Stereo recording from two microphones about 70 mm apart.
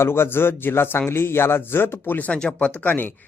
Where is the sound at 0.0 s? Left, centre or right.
Left.